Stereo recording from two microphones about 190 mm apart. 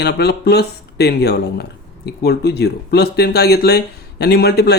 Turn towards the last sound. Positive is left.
turn(degrees=55)  # may be behind; listen again after turning